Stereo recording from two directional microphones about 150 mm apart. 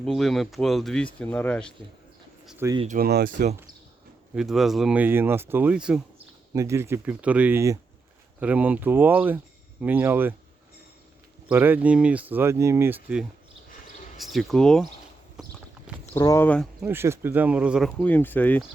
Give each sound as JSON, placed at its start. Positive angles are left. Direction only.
{"t": 0.0, "sound": "speech", "side_deg": 0}
{"t": 2.6, "sound": "speech", "side_deg": -15}
{"t": 3.0, "sound": "speech", "side_deg": -85}
{"t": 4.4, "sound": "speech", "side_deg": 0}
{"t": 6.5, "sound": "speech", "side_deg": -20}
{"t": 11.4, "sound": "speech", "side_deg": -15}
{"t": 16.1, "sound": "speech", "side_deg": 20}
{"t": 16.8, "sound": "speech", "side_deg": -15}
{"t": 18.0, "sound": "speech", "side_deg": 10}